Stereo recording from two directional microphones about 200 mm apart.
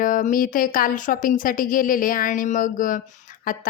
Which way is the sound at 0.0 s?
40° left (ahead or behind).